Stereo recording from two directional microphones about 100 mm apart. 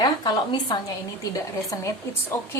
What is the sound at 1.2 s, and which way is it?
Speech, 35° left (ahead or behind).